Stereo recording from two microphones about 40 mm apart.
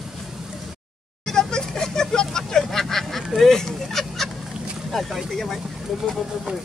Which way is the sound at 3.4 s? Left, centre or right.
Centre.